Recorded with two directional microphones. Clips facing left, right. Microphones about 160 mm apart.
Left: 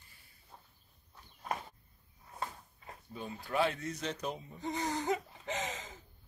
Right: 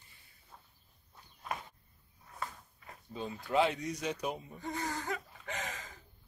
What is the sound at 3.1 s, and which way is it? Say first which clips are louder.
Speech: right 4 dB; 20° right (ahead or behind).